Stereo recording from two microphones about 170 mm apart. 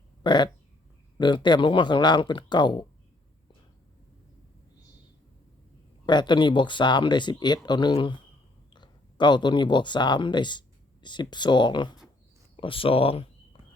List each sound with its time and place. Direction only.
0.2 s speech: 25° left (ahead or behind)
6.1 s speech: 25° left (ahead or behind)
12.5 s a sound: 30° left (ahead or behind)